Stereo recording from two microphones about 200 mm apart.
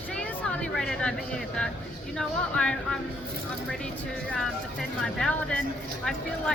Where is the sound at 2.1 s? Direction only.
5° left (ahead or behind).